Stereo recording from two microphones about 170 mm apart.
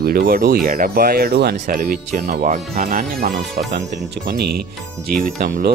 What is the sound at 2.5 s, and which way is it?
Speech, 45° right (ahead or behind).